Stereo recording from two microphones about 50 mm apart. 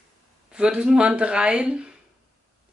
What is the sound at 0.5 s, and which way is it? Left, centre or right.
Speech, right.